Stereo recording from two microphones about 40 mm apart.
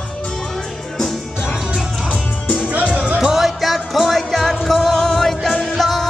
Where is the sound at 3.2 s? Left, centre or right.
Centre.